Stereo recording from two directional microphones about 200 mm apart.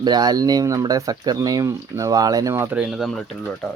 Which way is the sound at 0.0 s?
20° right (ahead or behind).